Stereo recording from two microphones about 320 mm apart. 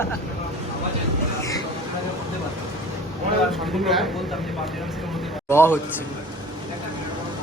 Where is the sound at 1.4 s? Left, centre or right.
Centre.